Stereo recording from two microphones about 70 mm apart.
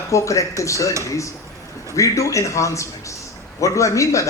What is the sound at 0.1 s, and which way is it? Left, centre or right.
A man's voice, left.